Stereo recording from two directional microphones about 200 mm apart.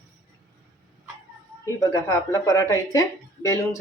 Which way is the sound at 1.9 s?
15° left (ahead or behind).